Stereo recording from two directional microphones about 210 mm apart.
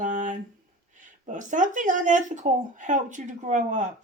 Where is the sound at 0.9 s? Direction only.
35° right (ahead or behind).